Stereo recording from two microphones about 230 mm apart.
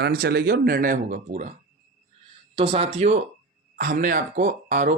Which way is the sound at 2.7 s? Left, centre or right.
Right.